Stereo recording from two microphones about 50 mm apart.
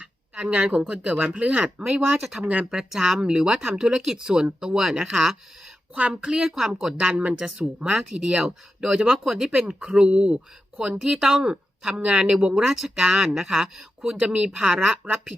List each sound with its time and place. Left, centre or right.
0.0 s speech: right
2.4 s speech: right
2.6 s speech: centre
6.5 s speech: centre
7.1 s speech: right
11.0 s speech: centre